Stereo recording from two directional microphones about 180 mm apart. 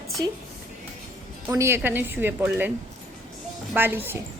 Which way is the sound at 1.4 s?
15° right (ahead or behind).